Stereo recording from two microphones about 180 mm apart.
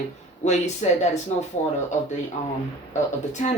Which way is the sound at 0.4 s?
40° left (ahead or behind).